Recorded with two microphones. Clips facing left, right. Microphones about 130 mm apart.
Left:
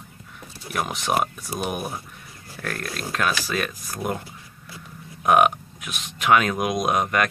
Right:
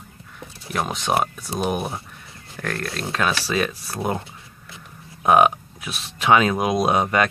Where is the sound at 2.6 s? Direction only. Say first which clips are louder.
Right 3 dB; 5° left (ahead or behind).